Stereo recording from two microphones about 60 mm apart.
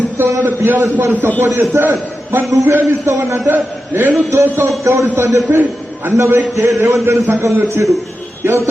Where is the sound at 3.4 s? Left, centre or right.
Right.